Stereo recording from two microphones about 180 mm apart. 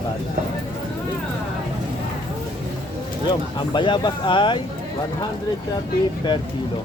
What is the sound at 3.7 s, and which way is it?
Speech, 25° left (ahead or behind).